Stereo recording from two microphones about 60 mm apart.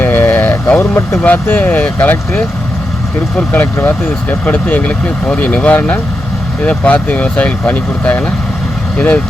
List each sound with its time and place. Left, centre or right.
0.0 s a sound: left
0.8 s speech: left
1.5 s speech: left
3.3 s speech: left